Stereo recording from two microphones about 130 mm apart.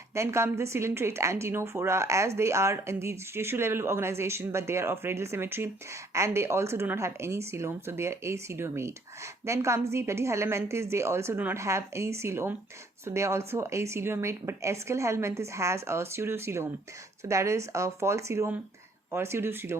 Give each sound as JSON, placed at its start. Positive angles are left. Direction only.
{"t": 0.1, "sound": "a woman's voice", "side_deg": -20}